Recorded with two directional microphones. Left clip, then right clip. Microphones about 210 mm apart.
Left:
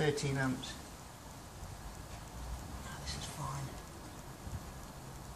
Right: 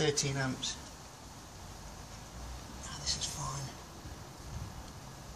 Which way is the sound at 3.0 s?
45° right (ahead or behind).